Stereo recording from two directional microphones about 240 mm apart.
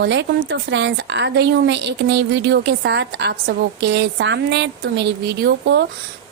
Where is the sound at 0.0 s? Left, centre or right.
Right.